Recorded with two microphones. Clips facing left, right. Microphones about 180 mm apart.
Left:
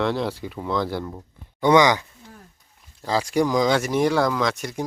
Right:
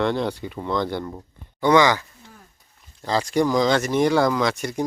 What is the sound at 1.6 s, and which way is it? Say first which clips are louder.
Speech: even; 20° left (ahead or behind).